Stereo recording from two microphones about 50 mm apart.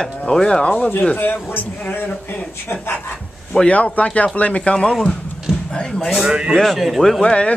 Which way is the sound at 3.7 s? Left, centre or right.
Left.